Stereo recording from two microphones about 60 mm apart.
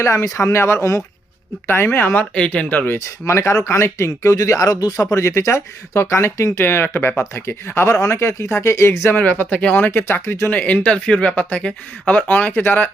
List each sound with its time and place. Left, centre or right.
0.0 s speech: left
1.6 s speech: left
2.3 s speech: centre; by 5.0 s left
5.1 s speech: left
6.6 s speech: left
9.1 s speech: left
9.7 s speech: left
10.5 s speech: left